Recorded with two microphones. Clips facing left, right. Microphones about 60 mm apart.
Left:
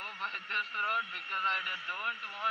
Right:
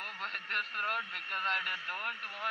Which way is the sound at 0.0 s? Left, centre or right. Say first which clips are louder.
Left 1 dB; right.